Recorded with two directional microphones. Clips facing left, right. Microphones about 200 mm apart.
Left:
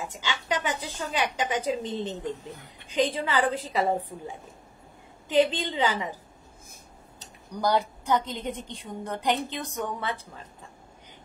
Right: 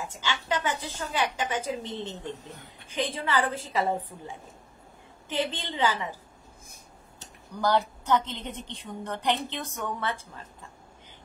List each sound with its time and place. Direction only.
0.1 s a woman's voice: 15° left (ahead or behind)
5.3 s a woman's voice: 15° left (ahead or behind)
7.2 s a woman's voice: 15° left (ahead or behind)